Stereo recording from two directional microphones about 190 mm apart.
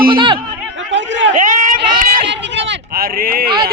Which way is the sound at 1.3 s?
40° right (ahead or behind).